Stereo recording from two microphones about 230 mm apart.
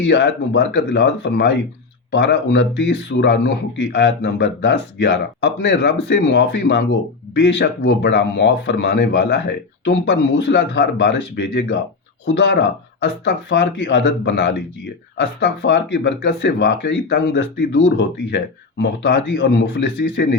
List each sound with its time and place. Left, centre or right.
0.0 s speech: left